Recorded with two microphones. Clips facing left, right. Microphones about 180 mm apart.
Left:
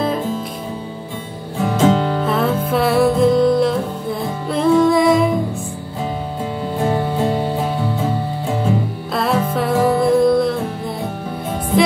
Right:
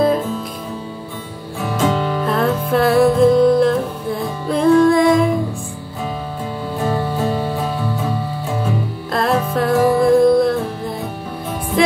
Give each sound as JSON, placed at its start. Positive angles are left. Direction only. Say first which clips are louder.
{"t": 1.6, "sound": "music", "louder": "left 3 dB", "side_deg": 20}
{"t": 2.2, "sound": "music", "louder": "even", "side_deg": 0}
{"t": 6.8, "sound": "music", "louder": "left 1 dB", "side_deg": 25}
{"t": 9.1, "sound": "music", "louder": "right 1 dB", "side_deg": 0}